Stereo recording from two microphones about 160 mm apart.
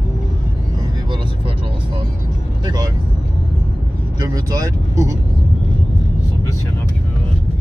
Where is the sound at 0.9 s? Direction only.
30° right (ahead or behind).